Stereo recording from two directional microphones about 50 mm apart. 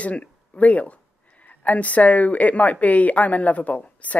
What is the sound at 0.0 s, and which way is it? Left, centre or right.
Speech, left.